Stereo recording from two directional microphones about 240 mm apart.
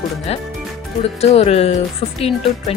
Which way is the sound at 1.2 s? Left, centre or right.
Left.